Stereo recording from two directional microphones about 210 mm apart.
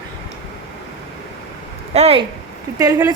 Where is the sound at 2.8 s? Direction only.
15° right (ahead or behind).